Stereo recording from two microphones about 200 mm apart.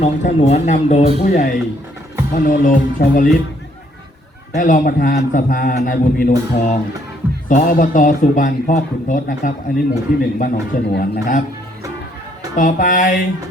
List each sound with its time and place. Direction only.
0.0 s speech: 35° left (ahead or behind)
4.5 s speech: 40° left (ahead or behind)
12.5 s speech: 40° left (ahead or behind)